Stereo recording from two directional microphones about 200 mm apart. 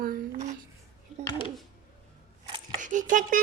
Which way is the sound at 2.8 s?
40° right (ahead or behind).